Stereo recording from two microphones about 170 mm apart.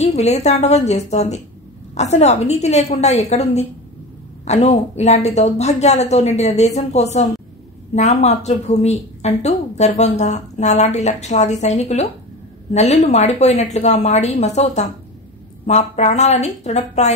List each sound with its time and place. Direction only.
0.0 s a woman's voice: 40° left (ahead or behind)